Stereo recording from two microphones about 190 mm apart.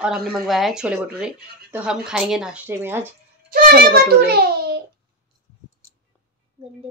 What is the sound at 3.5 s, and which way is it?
A child's voice, 50° right (ahead or behind).